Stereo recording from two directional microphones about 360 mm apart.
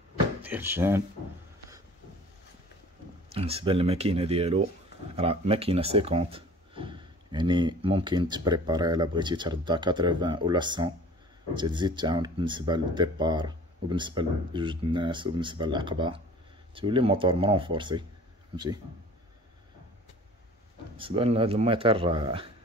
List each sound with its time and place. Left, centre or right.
0.4 s speech: centre
3.3 s speech: centre
21.0 s speech: centre